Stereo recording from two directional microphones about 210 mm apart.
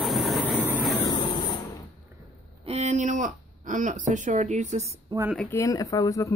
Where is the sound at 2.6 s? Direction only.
30° right (ahead or behind).